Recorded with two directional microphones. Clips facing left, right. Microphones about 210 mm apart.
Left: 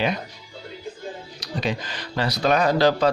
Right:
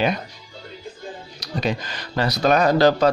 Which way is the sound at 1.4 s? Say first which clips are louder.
Right 2 dB; 45° right (ahead or behind).